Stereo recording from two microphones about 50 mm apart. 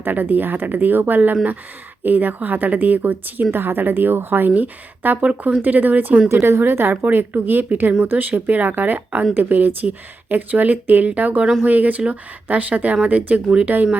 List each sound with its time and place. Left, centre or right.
0.0 s a woman's voice: right
6.2 s a woman's voice: right
6.6 s a woman's voice: right